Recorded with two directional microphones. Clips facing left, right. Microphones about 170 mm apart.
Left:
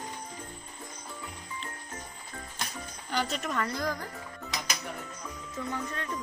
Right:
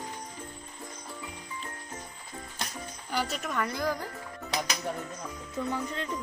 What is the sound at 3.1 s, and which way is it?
Speech, 5° right (ahead or behind).